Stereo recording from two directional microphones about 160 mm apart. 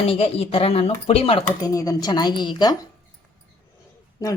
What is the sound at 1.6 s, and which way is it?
A woman's voice, 25° left (ahead or behind).